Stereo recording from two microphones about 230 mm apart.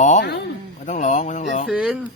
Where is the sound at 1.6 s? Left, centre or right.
Centre.